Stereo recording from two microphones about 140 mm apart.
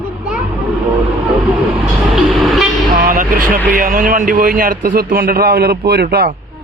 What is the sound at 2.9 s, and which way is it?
Vehicle, 90° right.